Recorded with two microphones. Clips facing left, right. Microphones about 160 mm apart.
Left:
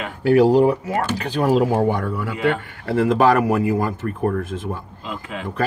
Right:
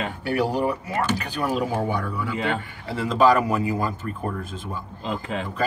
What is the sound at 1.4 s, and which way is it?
Speech, 55° left (ahead or behind).